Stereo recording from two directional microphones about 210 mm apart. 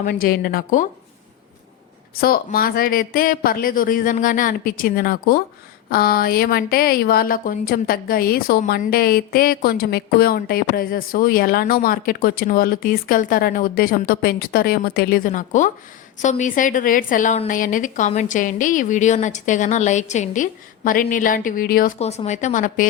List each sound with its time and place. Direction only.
0.0 s a woman's voice: 40° left (ahead or behind)
2.2 s a woman's voice: 45° left (ahead or behind)
21.9 s a woman's voice: 30° left (ahead or behind)